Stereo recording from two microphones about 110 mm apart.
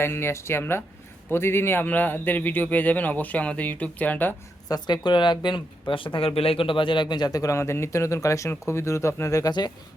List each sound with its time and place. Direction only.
0.0 s a man's voice: 20° left (ahead or behind)
4.7 s speech: 45° left (ahead or behind); by 9.5 s 30° left (ahead or behind)
9.5 s speech: 40° left (ahead or behind)